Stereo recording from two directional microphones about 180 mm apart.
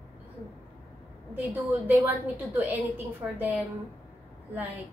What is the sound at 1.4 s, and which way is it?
A woman's voice, 10° right (ahead or behind).